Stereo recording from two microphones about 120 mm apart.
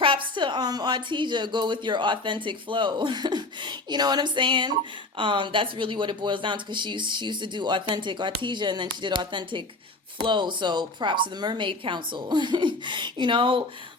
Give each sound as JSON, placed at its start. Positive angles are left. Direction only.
{"t": 0.0, "sound": "a woman's voice", "side_deg": -45}